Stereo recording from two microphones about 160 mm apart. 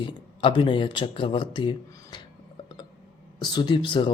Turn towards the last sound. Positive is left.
turn(degrees=30)  # may be behind; listen again after turning